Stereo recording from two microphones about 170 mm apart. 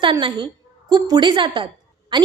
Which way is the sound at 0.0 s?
30° right (ahead or behind).